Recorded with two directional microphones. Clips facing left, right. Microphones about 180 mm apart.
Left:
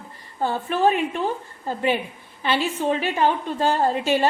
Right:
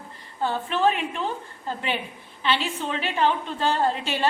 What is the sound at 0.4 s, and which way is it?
Speech, 45° left (ahead or behind).